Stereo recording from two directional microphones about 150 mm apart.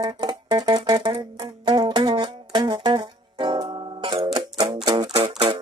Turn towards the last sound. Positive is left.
turn(degrees=-40)  # may be behind; listen again after turning